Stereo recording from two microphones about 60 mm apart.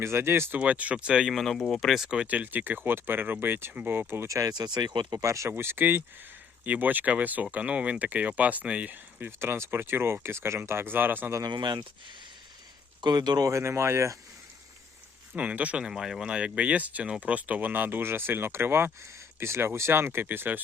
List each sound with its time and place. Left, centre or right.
0.0 s speech: right
0.6 s speech: right
1.3 s speech: centre
2.0 s speech: centre
2.2 s speech: right
4.3 s speech: right
4.8 s speech: right
5.2 s speech: right
5.5 s speech: right
8.9 s speech: right
13.1 s speech: right
13.6 s speech: right
15.4 s speech: right
15.8 s speech: centre; by 20.6 s right